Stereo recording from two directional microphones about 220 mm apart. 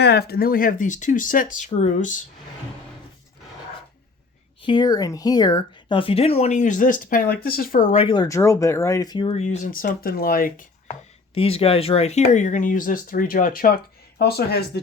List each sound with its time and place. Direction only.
0.0 s speech: 45° left (ahead or behind)
4.6 s speech: 20° left (ahead or behind); by 7.9 s 40° left (ahead or behind)
7.9 s speech: 20° left (ahead or behind); by 10.9 s 40° left (ahead or behind)
11.3 s speech: 25° left (ahead or behind); by 14.8 s 45° left (ahead or behind)